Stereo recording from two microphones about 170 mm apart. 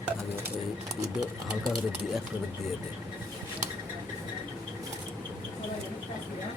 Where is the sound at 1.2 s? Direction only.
Centre (ahead or behind).